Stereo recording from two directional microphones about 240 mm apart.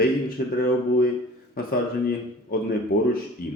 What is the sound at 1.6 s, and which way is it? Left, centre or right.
Speech, left.